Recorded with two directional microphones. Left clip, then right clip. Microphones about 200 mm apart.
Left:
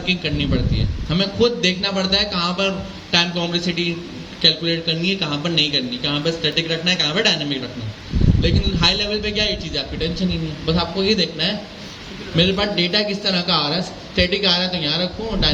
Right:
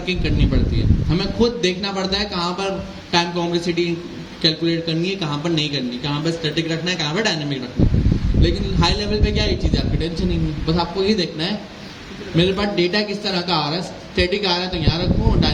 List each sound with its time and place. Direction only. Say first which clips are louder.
0.0 s a man's voice: left 2 dB; 55° right (ahead or behind)